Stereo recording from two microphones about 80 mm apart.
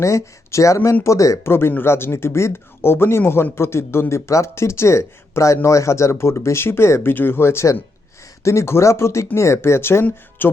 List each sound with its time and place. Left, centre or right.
0.0 s speech: left
1.5 s speech: left